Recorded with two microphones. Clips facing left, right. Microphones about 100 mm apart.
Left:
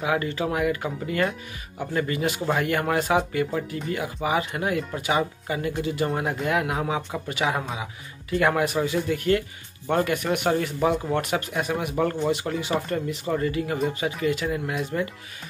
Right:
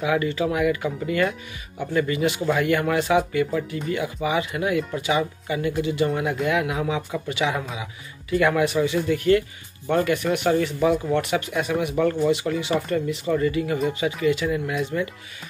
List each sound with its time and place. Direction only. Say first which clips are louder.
0.0 s speech: right 3 dB; 40° left (ahead or behind)
14.9 s speech: even; 30° left (ahead or behind)